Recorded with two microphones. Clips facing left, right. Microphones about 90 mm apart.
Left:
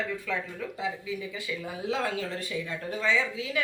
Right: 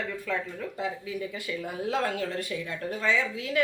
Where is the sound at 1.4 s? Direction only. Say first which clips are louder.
Right 2 dB; 55° right (ahead or behind).